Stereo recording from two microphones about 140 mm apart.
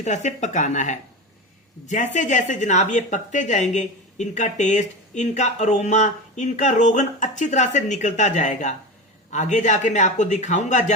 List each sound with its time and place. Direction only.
0.0 s speech: 60° left (ahead or behind)